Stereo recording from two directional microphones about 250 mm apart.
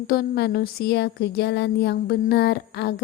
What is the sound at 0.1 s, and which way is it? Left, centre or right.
Speech, left.